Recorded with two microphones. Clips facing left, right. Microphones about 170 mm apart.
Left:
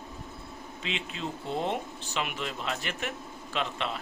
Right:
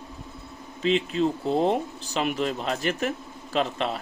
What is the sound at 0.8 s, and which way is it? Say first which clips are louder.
Speech: right 13 dB; 40° right (ahead or behind).